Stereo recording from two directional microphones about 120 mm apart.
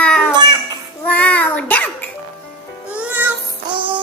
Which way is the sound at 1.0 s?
15° left (ahead or behind).